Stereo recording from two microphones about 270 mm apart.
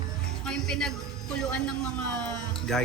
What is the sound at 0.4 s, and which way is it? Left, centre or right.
Music, centre.